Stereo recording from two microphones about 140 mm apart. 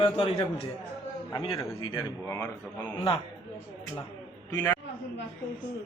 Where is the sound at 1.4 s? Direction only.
35° left (ahead or behind).